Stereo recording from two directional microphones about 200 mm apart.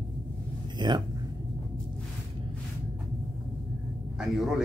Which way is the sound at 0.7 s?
20° right (ahead or behind).